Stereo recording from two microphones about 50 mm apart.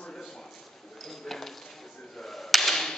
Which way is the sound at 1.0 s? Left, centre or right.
Centre.